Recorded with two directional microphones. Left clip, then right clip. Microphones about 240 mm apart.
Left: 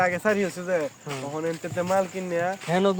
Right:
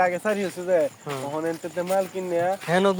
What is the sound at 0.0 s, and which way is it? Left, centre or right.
Speech, left.